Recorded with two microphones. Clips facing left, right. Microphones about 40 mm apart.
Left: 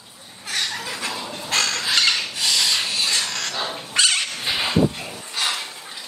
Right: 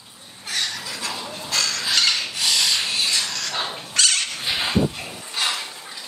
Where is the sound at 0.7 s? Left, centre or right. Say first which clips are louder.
Left 2 dB; left.